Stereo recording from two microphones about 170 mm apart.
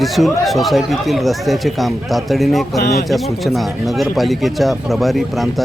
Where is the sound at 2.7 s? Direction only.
70° left (ahead or behind).